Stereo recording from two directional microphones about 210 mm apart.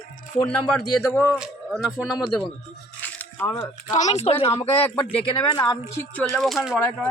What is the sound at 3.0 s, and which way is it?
Biting, 10° left (ahead or behind).